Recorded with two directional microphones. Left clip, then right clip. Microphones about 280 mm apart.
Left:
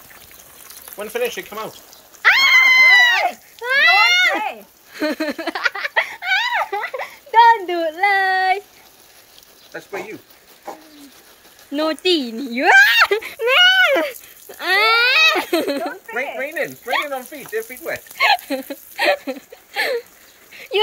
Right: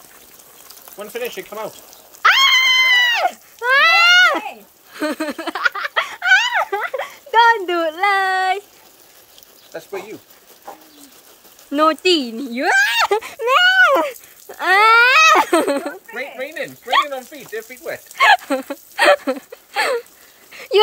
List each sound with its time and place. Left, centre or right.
0.9 s speech: centre
2.2 s cat: centre
4.5 s chicken: centre
7.2 s speech: centre
9.7 s speech: right
11.7 s a sound: centre
16.3 s speech: centre
19.2 s a sound: centre